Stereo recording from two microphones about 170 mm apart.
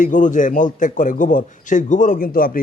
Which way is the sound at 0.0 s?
50° left (ahead or behind).